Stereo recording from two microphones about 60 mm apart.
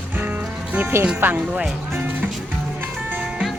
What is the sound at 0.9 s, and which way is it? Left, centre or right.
Speech, right.